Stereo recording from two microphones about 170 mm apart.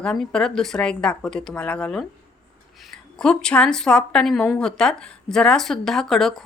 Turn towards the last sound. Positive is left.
turn(degrees=0)  # may be behind; listen again after turning